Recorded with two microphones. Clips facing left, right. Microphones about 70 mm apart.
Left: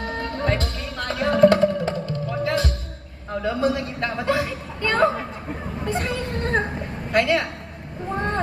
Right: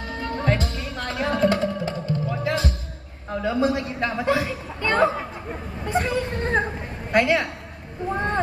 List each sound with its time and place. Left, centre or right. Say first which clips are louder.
0.4 s music: right 1 dB; right
1.4 s music: left 8 dB; left
2.0 s music: even; right
3.4 s a man's voice: even; right
5.9 s vehicle: right 3 dB; right
7.1 s a woman's voice: even; right